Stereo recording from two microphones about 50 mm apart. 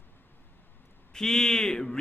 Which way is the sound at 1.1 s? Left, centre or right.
Centre.